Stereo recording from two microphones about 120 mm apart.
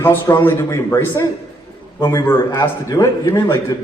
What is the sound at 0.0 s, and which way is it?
A man's voice, 20° left (ahead or behind).